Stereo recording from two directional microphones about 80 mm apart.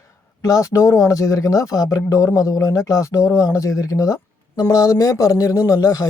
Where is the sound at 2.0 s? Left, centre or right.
Left.